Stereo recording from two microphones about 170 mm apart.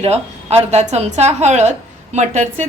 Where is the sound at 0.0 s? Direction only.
40° right (ahead or behind).